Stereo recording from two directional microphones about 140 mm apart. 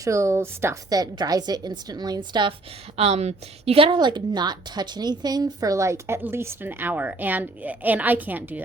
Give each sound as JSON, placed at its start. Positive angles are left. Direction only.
{"t": 0.0, "sound": "a woman's voice", "side_deg": -20}
{"t": 3.0, "sound": "a woman's voice", "side_deg": -50}